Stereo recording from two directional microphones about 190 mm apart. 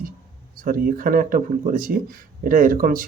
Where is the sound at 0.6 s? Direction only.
45° right (ahead or behind).